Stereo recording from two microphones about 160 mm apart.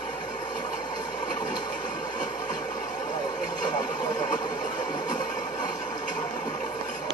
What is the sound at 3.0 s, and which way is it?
Vehicle, 25° left (ahead or behind).